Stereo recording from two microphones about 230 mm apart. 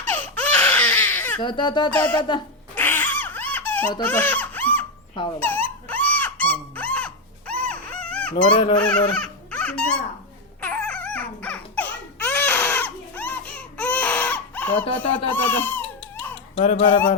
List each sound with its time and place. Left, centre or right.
0.0 s baby cry: centre
1.4 s speech: centre
1.9 s speech: centre
2.1 s a sound: centre
2.8 s giggle: centre
4.0 s speech: centre
5.4 s a sound: centre
8.8 s baby laughter: centre
10.6 s crying: centre
14.9 s baby cry: centre
16.6 s speech: left